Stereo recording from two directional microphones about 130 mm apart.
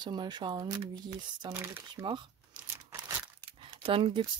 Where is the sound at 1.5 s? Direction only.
20° right (ahead or behind).